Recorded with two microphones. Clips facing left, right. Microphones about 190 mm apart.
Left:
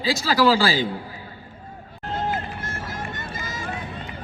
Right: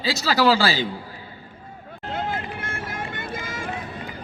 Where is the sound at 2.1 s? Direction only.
55° right (ahead or behind).